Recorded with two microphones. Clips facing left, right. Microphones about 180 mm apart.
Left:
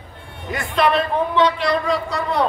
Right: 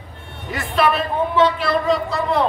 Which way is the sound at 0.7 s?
5° right (ahead or behind).